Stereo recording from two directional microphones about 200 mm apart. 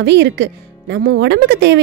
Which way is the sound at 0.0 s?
60° right (ahead or behind).